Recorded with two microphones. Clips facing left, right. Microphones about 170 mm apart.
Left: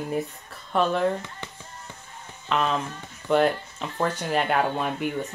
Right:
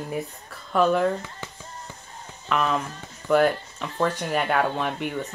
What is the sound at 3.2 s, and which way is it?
Speech, 25° left (ahead or behind).